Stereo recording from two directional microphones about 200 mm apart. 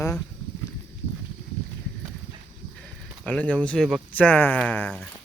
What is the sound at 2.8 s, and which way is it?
Speech, 5° left (ahead or behind).